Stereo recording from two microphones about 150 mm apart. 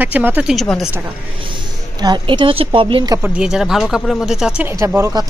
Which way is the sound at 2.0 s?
30° right (ahead or behind).